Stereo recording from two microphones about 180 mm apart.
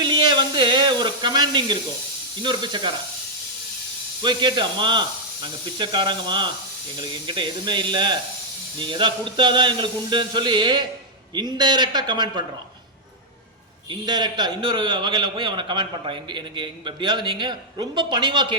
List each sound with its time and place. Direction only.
0.0 s a sound: 25° right (ahead or behind)
2.4 s a man's voice: 25° right (ahead or behind)
4.2 s a man's voice: 25° right (ahead or behind)
13.9 s a man's voice: 25° right (ahead or behind)